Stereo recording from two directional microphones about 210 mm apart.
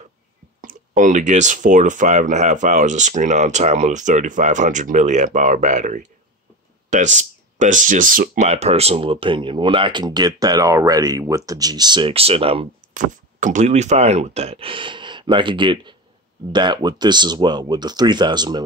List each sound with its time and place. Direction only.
0.6 s speech: 40° right (ahead or behind); by 18.6 s 20° right (ahead or behind)